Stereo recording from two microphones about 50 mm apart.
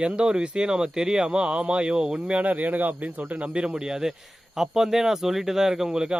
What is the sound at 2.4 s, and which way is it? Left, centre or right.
Speech, right.